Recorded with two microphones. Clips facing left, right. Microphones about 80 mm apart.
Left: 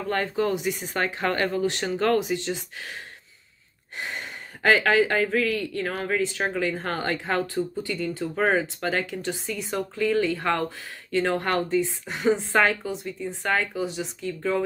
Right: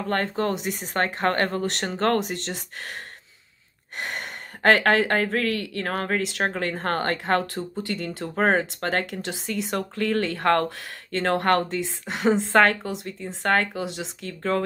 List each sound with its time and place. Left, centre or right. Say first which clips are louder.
0.1 s speech: even; right
4.0 s speech: right 2 dB; right
6.5 s speech: right 1 dB; right